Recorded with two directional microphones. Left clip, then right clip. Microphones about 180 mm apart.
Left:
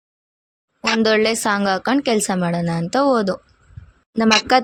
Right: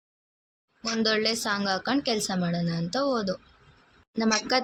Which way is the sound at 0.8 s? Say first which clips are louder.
Left 9 dB; 50° left (ahead or behind).